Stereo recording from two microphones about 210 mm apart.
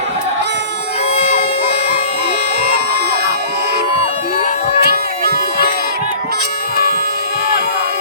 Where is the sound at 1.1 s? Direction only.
30° left (ahead or behind).